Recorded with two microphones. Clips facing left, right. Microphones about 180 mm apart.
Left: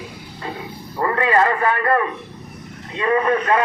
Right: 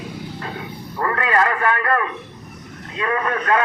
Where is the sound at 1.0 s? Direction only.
25° left (ahead or behind).